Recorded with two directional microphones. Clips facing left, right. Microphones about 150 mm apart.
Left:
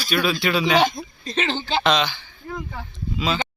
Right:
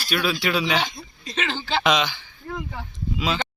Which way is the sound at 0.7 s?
50° left (ahead or behind).